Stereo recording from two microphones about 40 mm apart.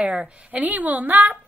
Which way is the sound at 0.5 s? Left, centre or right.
Right.